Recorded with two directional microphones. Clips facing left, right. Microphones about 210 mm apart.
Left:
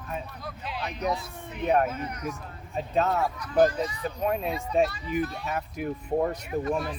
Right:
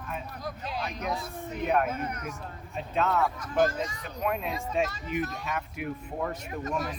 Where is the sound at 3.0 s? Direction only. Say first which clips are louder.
Left 2 dB; 35° left (ahead or behind).